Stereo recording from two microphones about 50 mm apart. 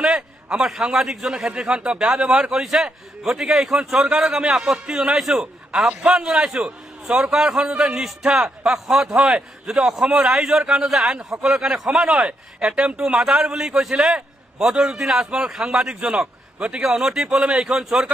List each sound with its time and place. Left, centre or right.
0.0 s a sound: centre
0.9 s a man's voice: centre
1.5 s a man's voice: centre